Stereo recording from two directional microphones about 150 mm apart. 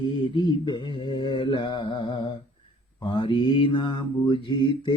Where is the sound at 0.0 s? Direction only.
30° left (ahead or behind).